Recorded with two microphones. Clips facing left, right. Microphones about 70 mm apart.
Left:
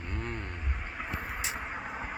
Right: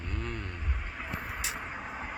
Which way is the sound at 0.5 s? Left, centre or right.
Centre.